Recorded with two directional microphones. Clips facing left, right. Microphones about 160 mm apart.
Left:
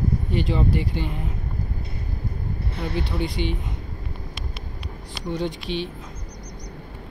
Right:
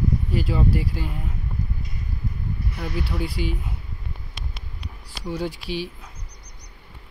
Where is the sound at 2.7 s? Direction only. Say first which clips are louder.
Left 3 dB; 25° left (ahead or behind).